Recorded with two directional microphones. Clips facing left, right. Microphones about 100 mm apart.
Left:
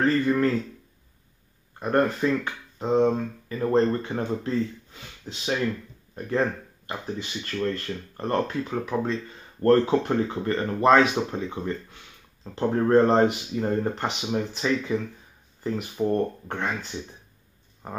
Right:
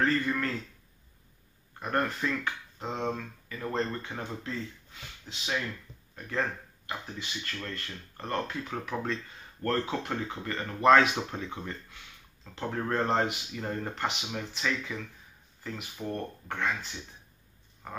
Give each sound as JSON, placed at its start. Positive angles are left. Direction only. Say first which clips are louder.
{"t": 0.3, "sound": "speech", "louder": "left 9 dB", "side_deg": 30}
{"t": 1.8, "sound": "speech", "louder": "left 7 dB", "side_deg": 25}
{"t": 8.6, "sound": "speech", "louder": "left 7 dB", "side_deg": 20}
{"t": 9.6, "sound": "speech", "louder": "left 11 dB", "side_deg": 35}
{"t": 10.9, "sound": "speech", "louder": "left 2 dB", "side_deg": 15}
{"t": 12.4, "sound": "speech", "louder": "left 10 dB", "side_deg": 30}
{"t": 17.8, "sound": "speech", "louder": "left 5 dB", "side_deg": 35}